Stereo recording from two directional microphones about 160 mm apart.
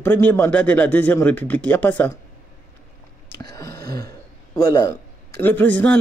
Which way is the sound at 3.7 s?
75° right (ahead or behind).